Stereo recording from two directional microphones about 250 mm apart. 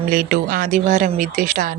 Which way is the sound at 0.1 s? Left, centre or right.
Right.